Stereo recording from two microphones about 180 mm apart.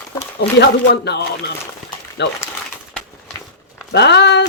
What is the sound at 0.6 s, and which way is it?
Speech, 65° left (ahead or behind).